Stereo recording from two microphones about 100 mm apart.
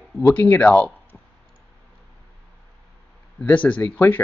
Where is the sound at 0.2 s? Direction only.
20° left (ahead or behind).